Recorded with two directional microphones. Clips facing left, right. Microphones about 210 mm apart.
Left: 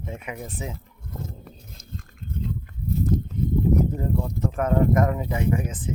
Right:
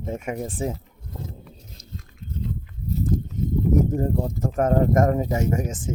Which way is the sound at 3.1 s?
45° right (ahead or behind).